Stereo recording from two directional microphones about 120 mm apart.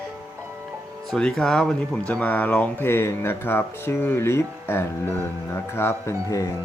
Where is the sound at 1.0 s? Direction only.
5° left (ahead or behind); by 6.5 s 25° left (ahead or behind).